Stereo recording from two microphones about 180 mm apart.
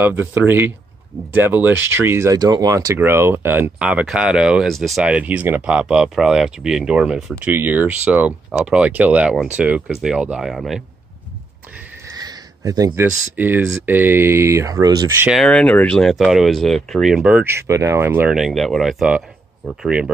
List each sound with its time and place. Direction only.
0.0 s speech: 10° right (ahead or behind)
12.2 s a sound: 20° right (ahead or behind)
13.4 s speech: 10° right (ahead or behind)
15.3 s speech: 5° left (ahead or behind)